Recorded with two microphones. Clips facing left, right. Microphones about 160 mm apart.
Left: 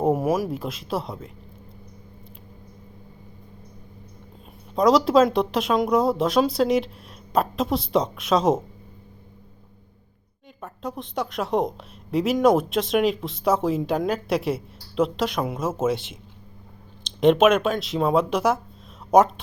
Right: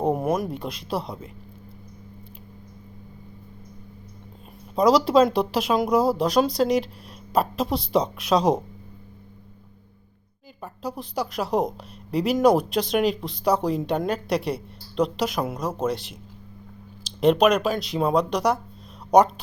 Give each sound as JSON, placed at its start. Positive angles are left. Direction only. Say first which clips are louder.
{"t": 0.0, "sound": "speech", "louder": "left 2 dB", "side_deg": 5}
{"t": 4.7, "sound": "speech", "louder": "even", "side_deg": 0}
{"t": 10.6, "sound": "speech", "louder": "even", "side_deg": 0}